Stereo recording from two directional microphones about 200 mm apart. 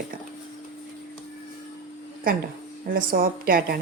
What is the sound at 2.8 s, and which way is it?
Speech, 45° right (ahead or behind).